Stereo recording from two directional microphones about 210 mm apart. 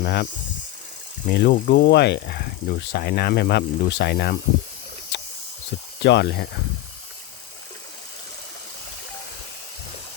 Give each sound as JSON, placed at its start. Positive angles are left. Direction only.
{"t": 0.0, "sound": "speech", "side_deg": 50}
{"t": 1.3, "sound": "speech", "side_deg": 55}
{"t": 5.1, "sound": "hiss", "side_deg": 55}
{"t": 6.0, "sound": "speech", "side_deg": 55}